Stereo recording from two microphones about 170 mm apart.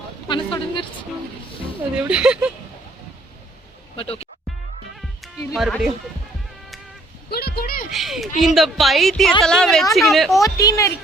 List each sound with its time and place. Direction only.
0.3 s a sound: 30° left (ahead or behind)
2.0 s a woman's voice: 5° right (ahead or behind)
3.9 s music: 35° left (ahead or behind)
5.5 s a woman's voice: centre (ahead or behind)
7.3 s a sound: 70° left (ahead or behind)
7.9 s a woman's voice: centre (ahead or behind)
10.4 s speech: 20° left (ahead or behind)